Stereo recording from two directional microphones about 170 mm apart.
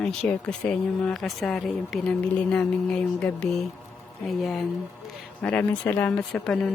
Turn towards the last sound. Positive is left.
turn(degrees=0)  # may be behind; listen again after turning